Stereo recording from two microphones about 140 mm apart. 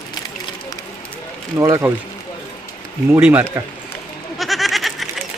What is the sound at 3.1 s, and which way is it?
Speech, 15° right (ahead or behind).